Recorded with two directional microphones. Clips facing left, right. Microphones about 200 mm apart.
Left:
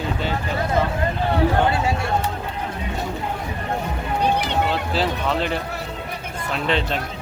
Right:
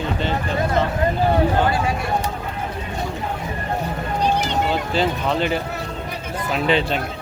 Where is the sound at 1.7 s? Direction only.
25° left (ahead or behind).